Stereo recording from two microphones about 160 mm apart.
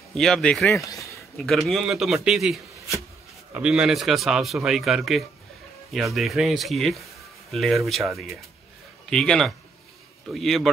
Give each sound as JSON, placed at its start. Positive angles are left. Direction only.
{"t": 0.1, "sound": "a man's voice", "side_deg": 5}
{"t": 0.7, "sound": "speech", "side_deg": 20}
{"t": 1.4, "sound": "a man's voice", "side_deg": 0}
{"t": 9.1, "sound": "a man's voice", "side_deg": 5}